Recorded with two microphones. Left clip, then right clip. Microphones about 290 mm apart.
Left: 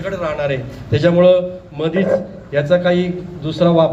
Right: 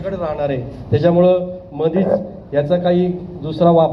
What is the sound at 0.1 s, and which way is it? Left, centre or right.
A man's voice, left.